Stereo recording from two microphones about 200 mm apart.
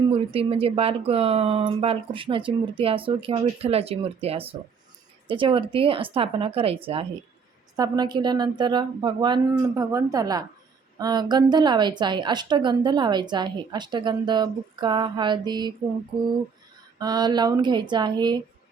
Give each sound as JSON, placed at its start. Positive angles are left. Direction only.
{"t": 0.1, "sound": "a woman's voice", "side_deg": -30}
{"t": 17.0, "sound": "a woman's voice", "side_deg": -20}